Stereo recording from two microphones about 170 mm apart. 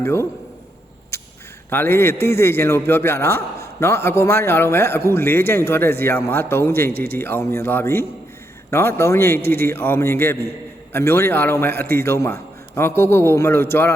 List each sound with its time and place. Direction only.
0.0 s a man's voice: 15° left (ahead or behind)
1.7 s a man's voice: 15° left (ahead or behind)
6.9 s a man's voice: 65° right (ahead or behind)
7.2 s a man's voice: 15° left (ahead or behind)